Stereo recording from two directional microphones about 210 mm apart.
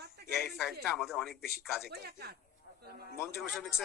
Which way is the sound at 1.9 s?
50° right (ahead or behind).